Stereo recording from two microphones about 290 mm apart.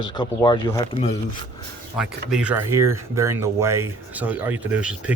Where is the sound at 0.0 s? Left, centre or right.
Centre.